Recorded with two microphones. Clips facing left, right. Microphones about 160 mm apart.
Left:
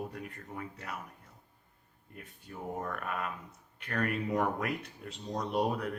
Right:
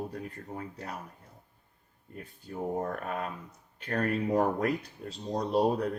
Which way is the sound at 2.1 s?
35° right (ahead or behind).